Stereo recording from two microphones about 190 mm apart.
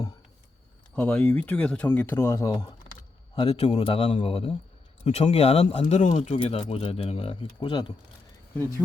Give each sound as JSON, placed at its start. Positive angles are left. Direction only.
{"t": 0.9, "sound": "a man's voice", "side_deg": 10}